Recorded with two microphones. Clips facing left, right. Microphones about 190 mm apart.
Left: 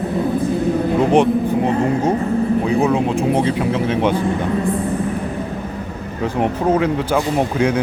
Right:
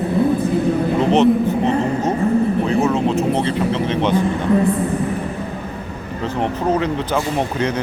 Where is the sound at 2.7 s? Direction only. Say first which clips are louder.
Left 1 dB; 15° left (ahead or behind).